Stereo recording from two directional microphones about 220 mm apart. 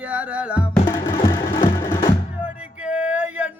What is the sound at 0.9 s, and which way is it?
Music, 15° left (ahead or behind).